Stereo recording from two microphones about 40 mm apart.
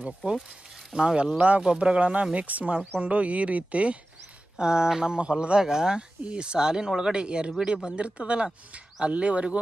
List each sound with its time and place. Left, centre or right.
0.0 s speech: right
2.3 s speech: right
4.6 s speech: centre